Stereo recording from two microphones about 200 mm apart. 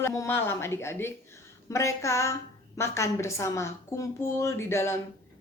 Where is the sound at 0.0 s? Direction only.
15° left (ahead or behind).